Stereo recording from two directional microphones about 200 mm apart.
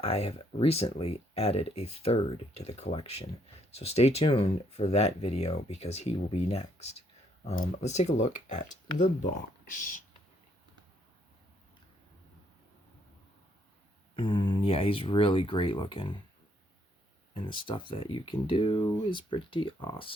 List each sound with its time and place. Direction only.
0.0 s speech: 30° left (ahead or behind)
14.2 s speech: 25° left (ahead or behind)
17.3 s speech: 25° left (ahead or behind)